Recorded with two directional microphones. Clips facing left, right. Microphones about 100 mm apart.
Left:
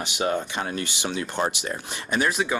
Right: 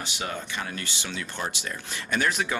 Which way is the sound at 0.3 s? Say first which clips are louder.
Left 8 dB; 25° left (ahead or behind).